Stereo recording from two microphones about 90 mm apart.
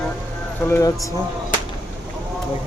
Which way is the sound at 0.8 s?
40° left (ahead or behind).